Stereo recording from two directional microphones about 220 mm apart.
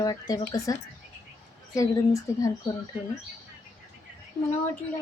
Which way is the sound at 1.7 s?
15° left (ahead or behind).